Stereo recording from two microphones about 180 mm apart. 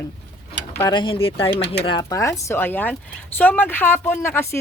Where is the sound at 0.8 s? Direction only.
25° left (ahead or behind).